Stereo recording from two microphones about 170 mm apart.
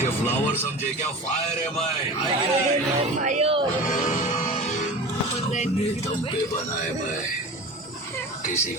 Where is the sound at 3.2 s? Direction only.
40° right (ahead or behind).